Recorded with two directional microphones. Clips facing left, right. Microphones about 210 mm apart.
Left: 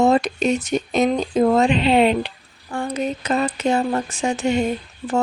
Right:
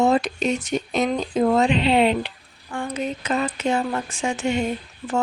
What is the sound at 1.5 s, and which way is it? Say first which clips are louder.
Speech: left 1 dB; 45° left (ahead or behind).